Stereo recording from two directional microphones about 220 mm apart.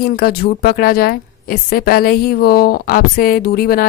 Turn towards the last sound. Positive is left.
turn(degrees=45)  # may be behind; listen again after turning